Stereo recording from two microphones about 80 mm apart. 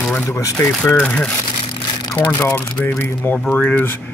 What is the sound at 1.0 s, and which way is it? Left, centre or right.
Speech, centre.